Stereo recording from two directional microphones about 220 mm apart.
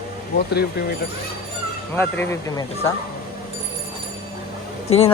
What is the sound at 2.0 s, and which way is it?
Speech, 10° left (ahead or behind).